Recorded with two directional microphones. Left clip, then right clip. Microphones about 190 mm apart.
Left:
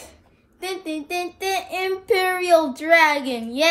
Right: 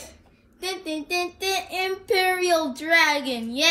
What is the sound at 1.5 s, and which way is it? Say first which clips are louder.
Child singing: left 4 dB; 55° left (ahead or behind).